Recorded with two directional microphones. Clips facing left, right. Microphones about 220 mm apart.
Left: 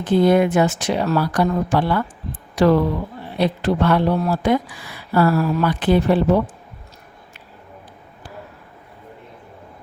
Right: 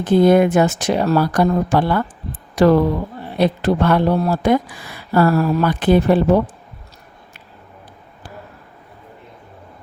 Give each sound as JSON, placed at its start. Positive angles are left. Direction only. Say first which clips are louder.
{"t": 0.0, "sound": "speech", "louder": "right 3 dB", "side_deg": -45}